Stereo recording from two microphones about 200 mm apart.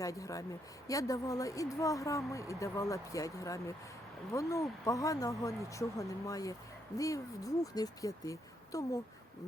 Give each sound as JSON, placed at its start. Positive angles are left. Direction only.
{"t": 0.0, "sound": "speech", "side_deg": 15}